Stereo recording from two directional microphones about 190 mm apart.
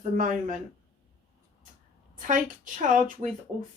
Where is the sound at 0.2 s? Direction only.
45° right (ahead or behind).